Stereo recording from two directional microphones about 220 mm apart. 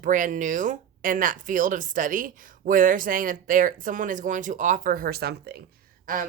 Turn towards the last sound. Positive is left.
turn(degrees=-40)  # may be behind; listen again after turning